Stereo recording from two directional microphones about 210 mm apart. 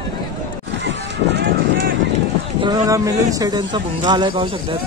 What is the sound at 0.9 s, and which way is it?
Run, 55° right (ahead or behind).